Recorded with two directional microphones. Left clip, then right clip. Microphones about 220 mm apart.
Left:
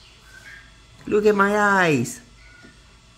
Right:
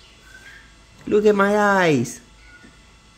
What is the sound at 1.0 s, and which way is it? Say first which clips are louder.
Speech: right 1 dB; 10° right (ahead or behind).